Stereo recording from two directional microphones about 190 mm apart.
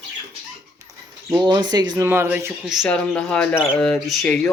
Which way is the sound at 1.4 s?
20° right (ahead or behind).